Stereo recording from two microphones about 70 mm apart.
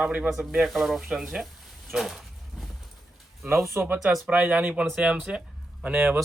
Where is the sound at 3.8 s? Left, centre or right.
Right.